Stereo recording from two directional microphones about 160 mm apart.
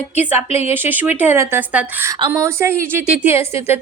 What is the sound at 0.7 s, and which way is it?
Speech, 10° right (ahead or behind).